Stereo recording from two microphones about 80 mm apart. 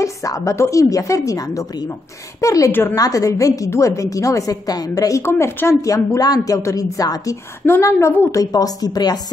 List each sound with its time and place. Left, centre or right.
0.0 s a woman's voice: left
2.7 s a woman's voice: left
3.0 s a woman's voice: left
5.2 s a woman's voice: left
7.8 s a woman's voice: left